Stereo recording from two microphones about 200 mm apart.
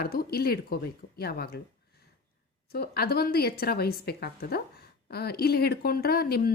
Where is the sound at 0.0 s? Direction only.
50° left (ahead or behind).